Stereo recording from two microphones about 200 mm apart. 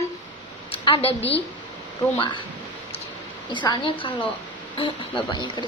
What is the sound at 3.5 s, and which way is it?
A woman's voice, 25° left (ahead or behind).